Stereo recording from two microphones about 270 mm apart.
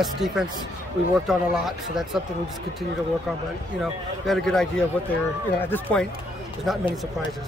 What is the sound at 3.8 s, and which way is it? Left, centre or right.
Speech, centre.